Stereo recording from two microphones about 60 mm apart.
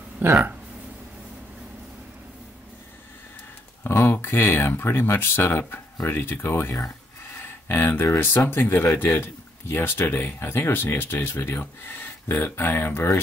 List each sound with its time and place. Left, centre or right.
0.2 s speech: right
3.8 s speech: left